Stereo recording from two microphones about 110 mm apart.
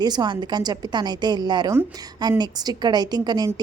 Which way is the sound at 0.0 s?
40° right (ahead or behind).